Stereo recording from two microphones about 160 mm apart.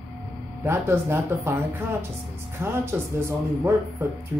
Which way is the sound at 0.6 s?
15° right (ahead or behind).